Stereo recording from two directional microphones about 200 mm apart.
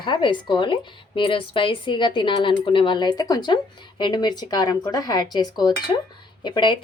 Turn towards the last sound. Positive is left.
turn(degrees=25)  # may be behind; listen again after turning